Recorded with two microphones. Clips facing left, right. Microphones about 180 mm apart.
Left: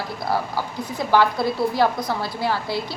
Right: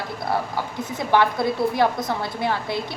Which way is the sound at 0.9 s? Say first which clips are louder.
Left 1 dB; 20° right (ahead or behind).